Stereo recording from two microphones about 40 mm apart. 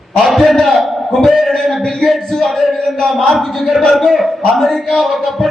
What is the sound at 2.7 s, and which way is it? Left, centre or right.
Speech, centre.